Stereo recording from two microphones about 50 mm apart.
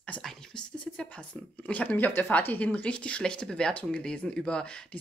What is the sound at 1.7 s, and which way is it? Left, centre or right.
Speech, left.